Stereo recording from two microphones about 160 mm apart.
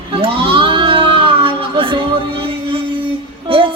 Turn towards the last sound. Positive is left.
turn(degrees=-35)  # may be behind; listen again after turning